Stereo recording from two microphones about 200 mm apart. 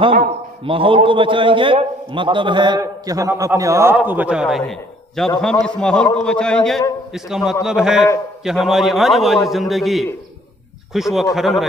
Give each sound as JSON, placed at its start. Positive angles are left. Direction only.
{"t": 0.7, "sound": "a man's voice", "side_deg": -25}